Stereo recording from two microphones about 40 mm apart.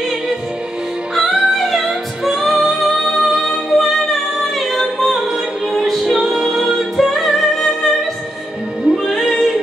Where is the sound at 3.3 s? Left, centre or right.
Centre.